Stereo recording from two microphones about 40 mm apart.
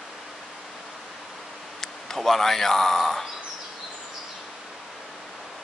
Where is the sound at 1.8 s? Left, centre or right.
Centre.